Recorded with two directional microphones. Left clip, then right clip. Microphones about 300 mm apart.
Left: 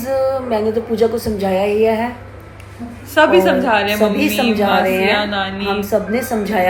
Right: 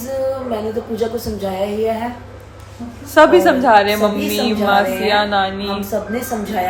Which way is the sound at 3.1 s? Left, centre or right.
Centre.